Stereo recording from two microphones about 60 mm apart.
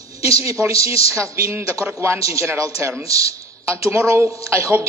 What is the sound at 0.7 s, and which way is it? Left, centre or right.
A man's voice, right.